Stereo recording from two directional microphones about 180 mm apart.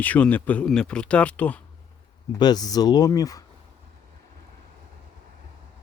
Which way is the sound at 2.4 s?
20° left (ahead or behind).